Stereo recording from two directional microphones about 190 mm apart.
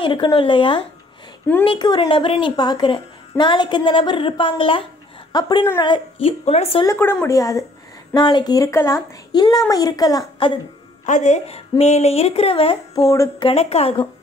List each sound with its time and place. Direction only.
0.0 s a woman's voice: 25° left (ahead or behind)
6.9 s a woman's voice: 10° left (ahead or behind)
11.1 s speech: 40° left (ahead or behind)
12.9 s a woman's voice: 15° left (ahead or behind)
13.5 s speech: 30° left (ahead or behind)